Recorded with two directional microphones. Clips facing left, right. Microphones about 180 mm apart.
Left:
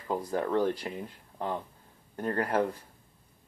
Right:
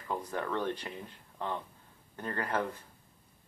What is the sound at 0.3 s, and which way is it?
Speech, 35° left (ahead or behind).